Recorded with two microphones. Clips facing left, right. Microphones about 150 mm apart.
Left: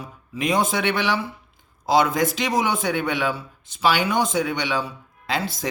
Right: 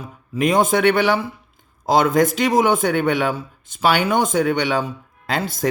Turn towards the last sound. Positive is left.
turn(degrees=-50)  # may be behind; listen again after turning